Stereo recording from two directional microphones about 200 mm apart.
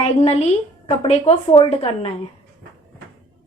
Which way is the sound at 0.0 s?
30° left (ahead or behind).